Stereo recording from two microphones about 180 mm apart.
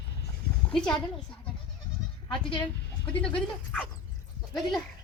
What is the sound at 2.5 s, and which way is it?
Chicken, 25° left (ahead or behind).